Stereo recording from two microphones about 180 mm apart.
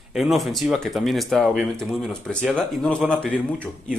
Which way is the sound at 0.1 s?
Centre (ahead or behind).